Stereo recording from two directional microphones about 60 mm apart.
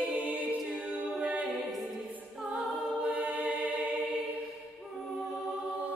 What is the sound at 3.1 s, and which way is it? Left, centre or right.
Music, right.